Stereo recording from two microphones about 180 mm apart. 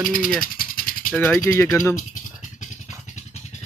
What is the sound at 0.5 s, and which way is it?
Rattle, 50° left (ahead or behind).